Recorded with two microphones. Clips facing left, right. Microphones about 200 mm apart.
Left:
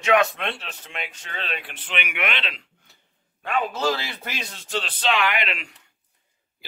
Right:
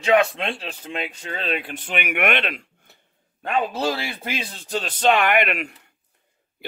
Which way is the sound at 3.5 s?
30° right (ahead or behind).